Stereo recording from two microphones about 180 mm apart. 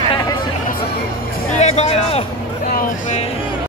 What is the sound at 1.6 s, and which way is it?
Speech, 35° left (ahead or behind).